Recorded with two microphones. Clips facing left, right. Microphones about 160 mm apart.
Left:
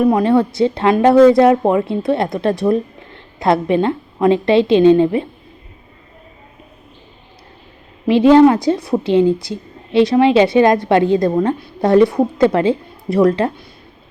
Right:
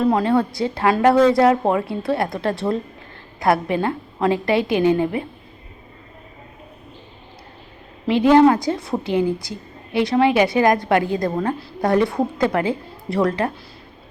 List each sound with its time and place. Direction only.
0.0 s a woman's voice: 20° left (ahead or behind)
8.0 s a woman's voice: 20° left (ahead or behind)